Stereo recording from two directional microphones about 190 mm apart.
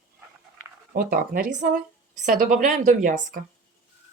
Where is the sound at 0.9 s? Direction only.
50° right (ahead or behind).